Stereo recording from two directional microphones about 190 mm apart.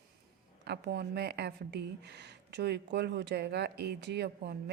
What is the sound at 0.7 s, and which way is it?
A woman's voice, 60° right (ahead or behind).